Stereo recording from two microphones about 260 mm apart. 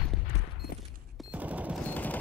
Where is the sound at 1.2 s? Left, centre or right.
Centre.